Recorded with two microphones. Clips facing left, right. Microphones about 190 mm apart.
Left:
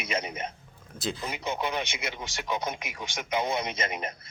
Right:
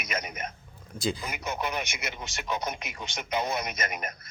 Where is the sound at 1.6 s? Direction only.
20° left (ahead or behind).